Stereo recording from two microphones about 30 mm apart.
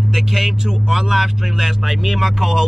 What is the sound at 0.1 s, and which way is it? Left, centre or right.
Speech, centre.